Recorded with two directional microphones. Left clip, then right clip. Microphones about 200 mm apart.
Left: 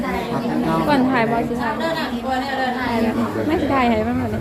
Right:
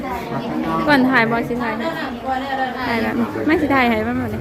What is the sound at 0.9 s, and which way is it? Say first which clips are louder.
Speech: right 5 dB; 20° right (ahead or behind).